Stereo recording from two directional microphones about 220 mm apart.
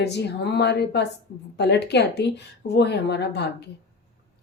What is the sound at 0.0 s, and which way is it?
Speech, 50° left (ahead or behind).